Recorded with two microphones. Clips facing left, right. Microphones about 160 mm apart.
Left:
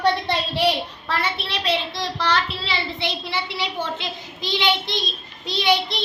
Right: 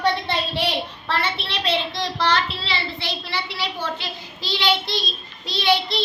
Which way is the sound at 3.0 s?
20° left (ahead or behind).